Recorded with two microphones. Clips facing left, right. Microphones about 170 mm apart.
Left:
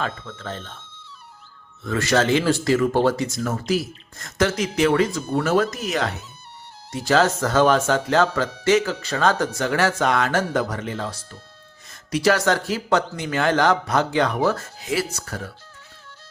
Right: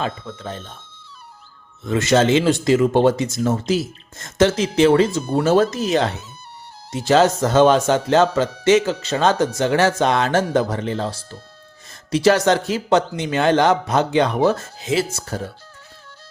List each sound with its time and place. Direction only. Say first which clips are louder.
0.0 s speech: right 3 dB; 15° right (ahead or behind)
1.8 s speech: right 4 dB; 20° right (ahead or behind)